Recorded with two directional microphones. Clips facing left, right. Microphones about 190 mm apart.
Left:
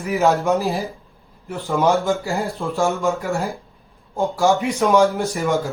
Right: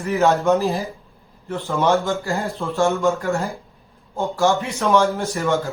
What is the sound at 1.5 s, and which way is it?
Speech, 15° left (ahead or behind).